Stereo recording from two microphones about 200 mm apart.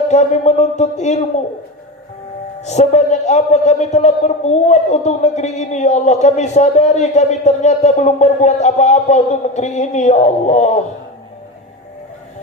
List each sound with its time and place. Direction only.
0.1 s a man's voice: 35° left (ahead or behind)
2.6 s a man's voice: 35° left (ahead or behind)